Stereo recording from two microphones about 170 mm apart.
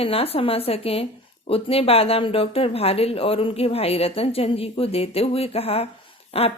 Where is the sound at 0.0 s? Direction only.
35° left (ahead or behind).